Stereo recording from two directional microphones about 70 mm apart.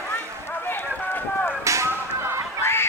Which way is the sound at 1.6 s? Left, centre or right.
Right.